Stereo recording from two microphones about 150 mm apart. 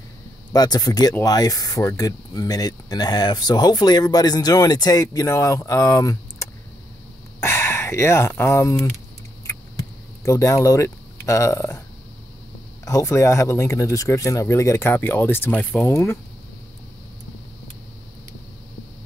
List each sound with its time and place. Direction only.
0.5 s speech: 25° left (ahead or behind)
10.2 s speech: 20° left (ahead or behind)
12.8 s speech: 20° left (ahead or behind)